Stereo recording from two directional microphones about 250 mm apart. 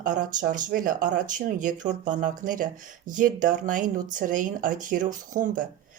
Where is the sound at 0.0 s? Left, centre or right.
Right.